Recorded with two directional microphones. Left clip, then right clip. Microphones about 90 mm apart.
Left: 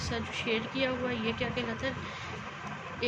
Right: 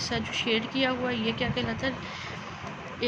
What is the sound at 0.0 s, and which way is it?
Speech, 45° right (ahead or behind).